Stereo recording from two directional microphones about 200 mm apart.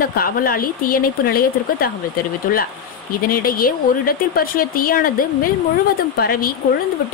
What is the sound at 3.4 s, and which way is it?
A woman's voice, 50° left (ahead or behind).